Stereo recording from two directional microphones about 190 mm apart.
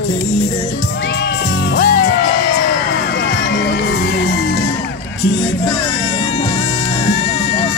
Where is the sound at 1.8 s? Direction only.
50° left (ahead or behind).